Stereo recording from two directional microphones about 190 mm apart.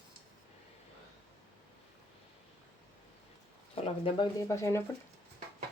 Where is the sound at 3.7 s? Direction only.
30° left (ahead or behind).